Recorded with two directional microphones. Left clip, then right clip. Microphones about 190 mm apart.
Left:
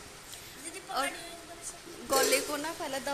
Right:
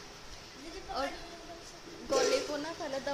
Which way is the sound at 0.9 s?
Centre (ahead or behind).